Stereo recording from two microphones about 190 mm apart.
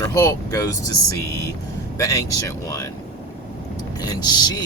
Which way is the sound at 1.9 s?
15° left (ahead or behind).